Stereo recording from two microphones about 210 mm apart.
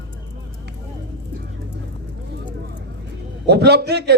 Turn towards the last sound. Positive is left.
turn(degrees=-50)  # may be behind; listen again after turning